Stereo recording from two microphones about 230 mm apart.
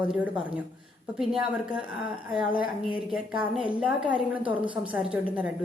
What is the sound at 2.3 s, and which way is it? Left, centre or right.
Speech, left.